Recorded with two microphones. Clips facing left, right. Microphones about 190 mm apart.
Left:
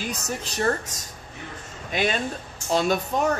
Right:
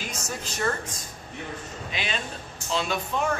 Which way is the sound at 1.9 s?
45° left (ahead or behind).